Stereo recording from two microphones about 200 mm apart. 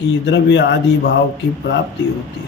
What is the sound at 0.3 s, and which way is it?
Speech, 60° left (ahead or behind).